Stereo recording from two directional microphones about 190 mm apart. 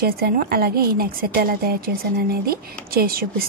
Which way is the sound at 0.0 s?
55° right (ahead or behind).